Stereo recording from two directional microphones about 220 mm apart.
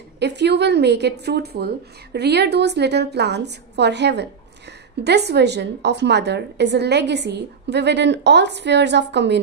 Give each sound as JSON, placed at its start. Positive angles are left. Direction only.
{"t": 0.2, "sound": "a woman's voice", "side_deg": -50}